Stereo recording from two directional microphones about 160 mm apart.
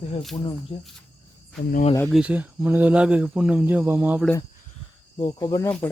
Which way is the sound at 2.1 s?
10° right (ahead or behind).